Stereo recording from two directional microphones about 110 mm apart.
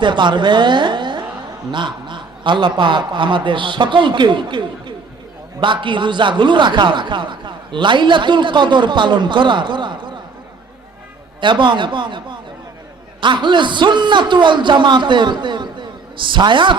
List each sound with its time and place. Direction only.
0.0 s a woman's voice: 45° right (ahead or behind)
11.3 s a man's voice: 45° right (ahead or behind)